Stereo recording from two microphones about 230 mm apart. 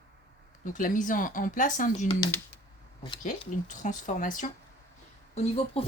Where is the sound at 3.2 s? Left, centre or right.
Left.